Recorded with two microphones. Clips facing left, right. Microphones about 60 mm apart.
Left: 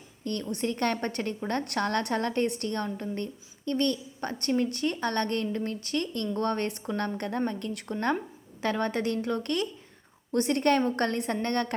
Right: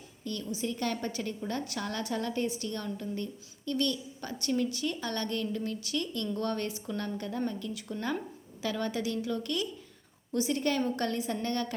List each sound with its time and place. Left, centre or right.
0.3 s a woman's voice: left